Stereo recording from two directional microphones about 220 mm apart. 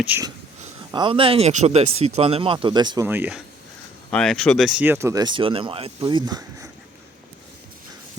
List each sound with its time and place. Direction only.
0.0 s speech: 10° right (ahead or behind)
0.9 s speech: 20° right (ahead or behind)
3.1 s speech: 5° right (ahead or behind)